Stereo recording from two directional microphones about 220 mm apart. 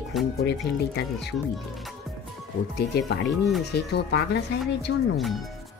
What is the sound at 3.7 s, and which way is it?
Speech, 50° left (ahead or behind).